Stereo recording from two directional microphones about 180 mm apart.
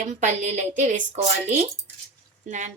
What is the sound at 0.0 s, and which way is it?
A woman's voice, 40° right (ahead or behind).